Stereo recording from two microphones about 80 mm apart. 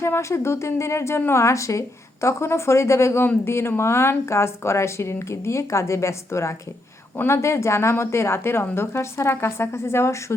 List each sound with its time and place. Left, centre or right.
0.0 s speech: left